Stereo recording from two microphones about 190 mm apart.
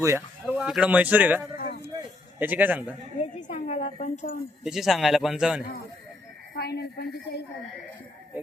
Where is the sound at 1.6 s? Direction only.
50° left (ahead or behind).